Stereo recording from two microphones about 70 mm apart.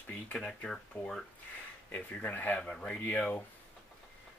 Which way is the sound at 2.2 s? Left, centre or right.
Left.